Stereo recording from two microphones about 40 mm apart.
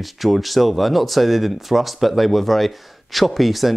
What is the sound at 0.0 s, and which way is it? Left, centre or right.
Speech, centre.